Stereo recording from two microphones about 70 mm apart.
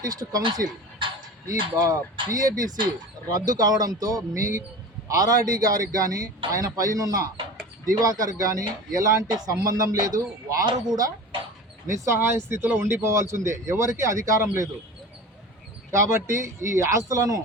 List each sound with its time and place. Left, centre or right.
0.0 s speech: right
11.9 s speech: right
15.9 s speech: right